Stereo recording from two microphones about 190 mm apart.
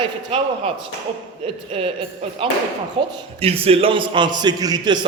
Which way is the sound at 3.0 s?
30° right (ahead or behind).